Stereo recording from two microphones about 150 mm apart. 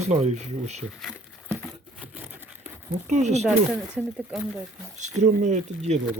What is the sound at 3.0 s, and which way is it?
Speech, 50° right (ahead or behind).